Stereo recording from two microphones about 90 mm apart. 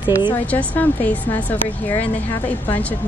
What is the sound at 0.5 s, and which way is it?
Speech, 20° left (ahead or behind).